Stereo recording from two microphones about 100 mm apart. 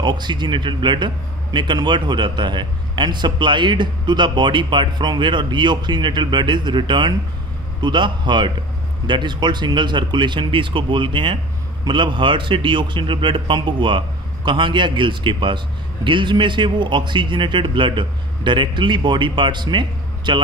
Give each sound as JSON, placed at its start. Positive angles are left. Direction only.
{"t": 0.0, "sound": "a man's voice", "side_deg": -50}